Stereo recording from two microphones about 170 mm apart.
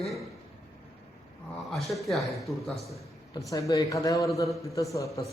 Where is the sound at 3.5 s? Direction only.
20° left (ahead or behind).